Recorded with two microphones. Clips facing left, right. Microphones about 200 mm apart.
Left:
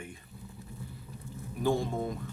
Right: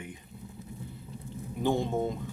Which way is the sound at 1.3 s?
20° right (ahead or behind).